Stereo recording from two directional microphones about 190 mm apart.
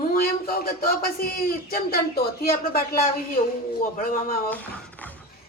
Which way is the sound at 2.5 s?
50° left (ahead or behind).